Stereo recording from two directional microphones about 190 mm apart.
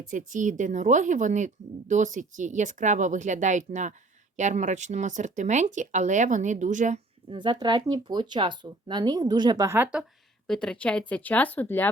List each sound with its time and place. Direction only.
0.1 s speech: 40° right (ahead or behind)
7.3 s speech: 25° right (ahead or behind); by 11.9 s 10° left (ahead or behind)